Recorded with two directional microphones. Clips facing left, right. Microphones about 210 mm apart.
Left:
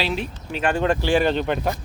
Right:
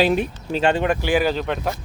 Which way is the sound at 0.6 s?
25° right (ahead or behind).